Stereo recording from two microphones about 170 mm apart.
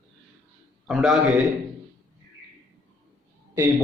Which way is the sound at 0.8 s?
Centre (ahead or behind).